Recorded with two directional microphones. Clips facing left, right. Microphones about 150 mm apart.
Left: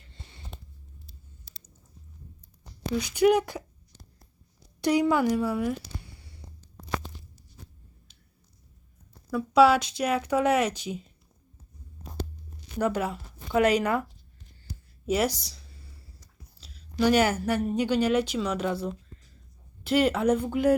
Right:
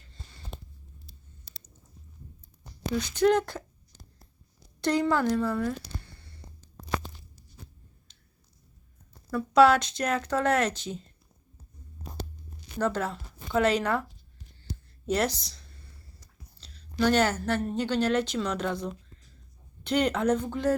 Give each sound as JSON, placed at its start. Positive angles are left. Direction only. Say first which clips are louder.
{"t": 0.1, "sound": "a sound", "louder": "left 1 dB", "side_deg": 25}
{"t": 2.9, "sound": "speech", "louder": "left 2 dB", "side_deg": 10}
{"t": 4.8, "sound": "speech", "louder": "left 2 dB", "side_deg": 10}
{"t": 9.3, "sound": "speech", "louder": "even", "side_deg": 10}
{"t": 12.8, "sound": "speech", "louder": "left 1 dB", "side_deg": 10}
{"t": 15.0, "sound": "a sound", "louder": "left 1 dB", "side_deg": 10}
{"t": 16.6, "sound": "a woman's voice", "louder": "left 1 dB", "side_deg": 5}